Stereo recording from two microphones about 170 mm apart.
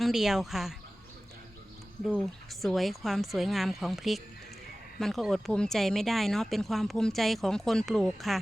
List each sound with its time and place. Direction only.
0.0 s speech: centre (ahead or behind)
2.0 s speech: 5° left (ahead or behind)